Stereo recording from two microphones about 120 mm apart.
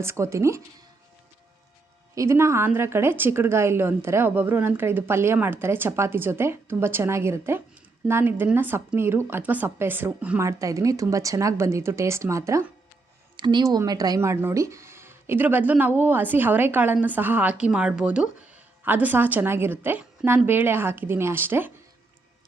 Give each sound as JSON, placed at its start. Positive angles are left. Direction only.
{"t": 0.0, "sound": "a woman's voice", "side_deg": -25}
{"t": 2.1, "sound": "a woman's voice", "side_deg": -25}
{"t": 10.4, "sound": "a woman's voice", "side_deg": -30}
{"t": 13.3, "sound": "a woman's voice", "side_deg": -40}